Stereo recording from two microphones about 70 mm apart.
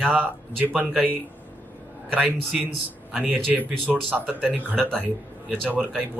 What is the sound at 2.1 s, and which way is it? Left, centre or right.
Speech, right.